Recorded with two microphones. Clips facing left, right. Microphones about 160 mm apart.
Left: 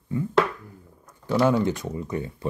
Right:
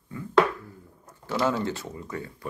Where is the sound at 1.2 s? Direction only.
15° left (ahead or behind).